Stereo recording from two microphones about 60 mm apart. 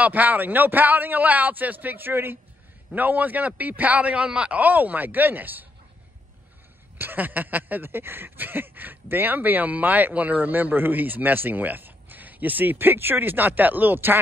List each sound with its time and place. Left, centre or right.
0.0 s a man's voice: right
7.0 s speech: right